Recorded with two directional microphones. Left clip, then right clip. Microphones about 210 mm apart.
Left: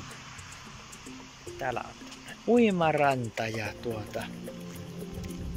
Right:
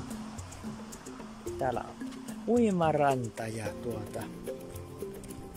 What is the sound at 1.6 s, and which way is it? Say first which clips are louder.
Speech: even; 15° right (ahead or behind).